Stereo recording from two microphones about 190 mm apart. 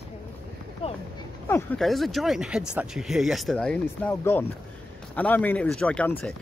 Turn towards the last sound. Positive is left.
turn(degrees=5)  # may be behind; listen again after turning